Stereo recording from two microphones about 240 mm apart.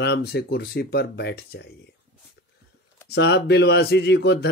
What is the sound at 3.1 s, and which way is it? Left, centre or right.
Speech, left.